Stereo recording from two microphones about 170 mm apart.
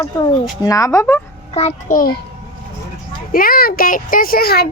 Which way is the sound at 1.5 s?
40° left (ahead or behind).